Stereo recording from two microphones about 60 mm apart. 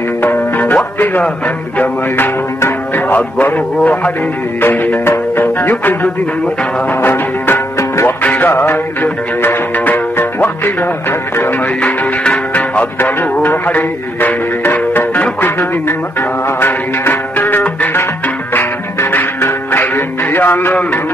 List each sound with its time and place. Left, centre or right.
0.2 s music: left
0.9 s speech: left
3.1 s speech: left
4.6 s music: left
8.5 s music: left
9.0 s music: left
11.8 s music: left
18.5 s music: left
19.4 s music: left
20.3 s a man's voice: left